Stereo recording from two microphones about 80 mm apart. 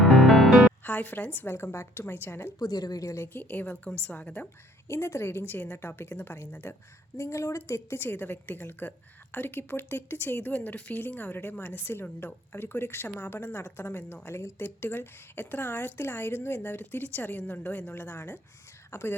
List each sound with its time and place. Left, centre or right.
0.0 s music: centre
0.9 s speech: left
2.6 s a woman's voice: left
3.3 s speech: left
4.9 s speech: left